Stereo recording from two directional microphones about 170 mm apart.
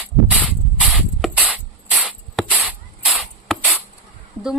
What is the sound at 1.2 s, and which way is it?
Ratchet, 5° right (ahead or behind).